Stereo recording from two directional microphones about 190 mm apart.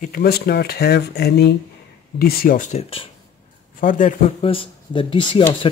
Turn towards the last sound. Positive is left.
turn(degrees=25)  # may be behind; listen again after turning